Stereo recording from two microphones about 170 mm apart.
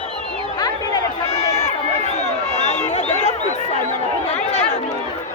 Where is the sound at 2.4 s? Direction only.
40° left (ahead or behind).